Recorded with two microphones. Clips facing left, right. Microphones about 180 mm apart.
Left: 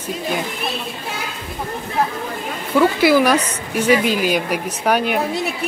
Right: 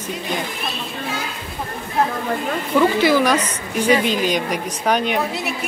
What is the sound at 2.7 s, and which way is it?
Speech, 5° left (ahead or behind).